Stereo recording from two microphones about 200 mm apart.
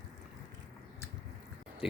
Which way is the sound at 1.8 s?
5° right (ahead or behind).